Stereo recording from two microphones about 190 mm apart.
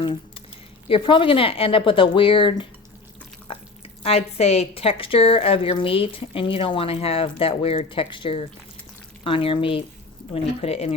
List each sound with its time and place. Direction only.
0.0 s squish: 25° left (ahead or behind)
0.9 s a woman's voice: 25° left (ahead or behind)
3.5 s a sound: 30° left (ahead or behind)
4.0 s a woman's voice: 35° left (ahead or behind)